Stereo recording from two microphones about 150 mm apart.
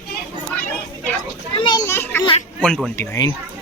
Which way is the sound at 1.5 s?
30° left (ahead or behind).